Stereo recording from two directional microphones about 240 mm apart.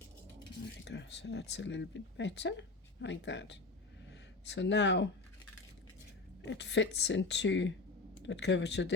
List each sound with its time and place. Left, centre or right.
0.9 s speech: left
6.4 s speech: left